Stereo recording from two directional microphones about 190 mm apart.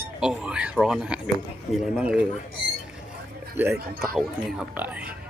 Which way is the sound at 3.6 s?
10° right (ahead or behind).